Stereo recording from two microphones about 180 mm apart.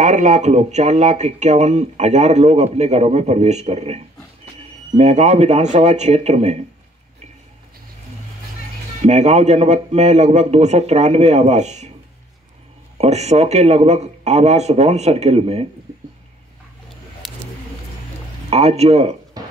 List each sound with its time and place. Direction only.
0.0 s speech: 40° right (ahead or behind)
9.0 s speech: 40° right (ahead or behind)
12.9 s speech: 35° right (ahead or behind)
17.2 s a sound: centre (ahead or behind)
18.5 s speech: 35° right (ahead or behind)
19.4 s music: 20° right (ahead or behind)